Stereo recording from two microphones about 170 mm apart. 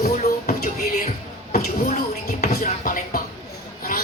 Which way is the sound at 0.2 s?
45° left (ahead or behind).